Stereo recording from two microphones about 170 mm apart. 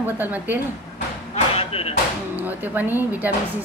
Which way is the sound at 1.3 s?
35° left (ahead or behind).